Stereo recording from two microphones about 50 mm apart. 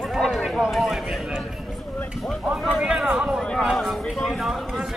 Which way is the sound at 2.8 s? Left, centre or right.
Centre.